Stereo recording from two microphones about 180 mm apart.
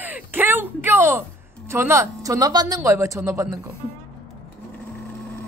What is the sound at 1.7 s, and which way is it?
Speech, 15° right (ahead or behind).